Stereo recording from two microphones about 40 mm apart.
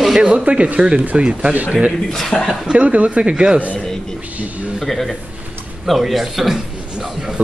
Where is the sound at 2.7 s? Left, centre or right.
Right.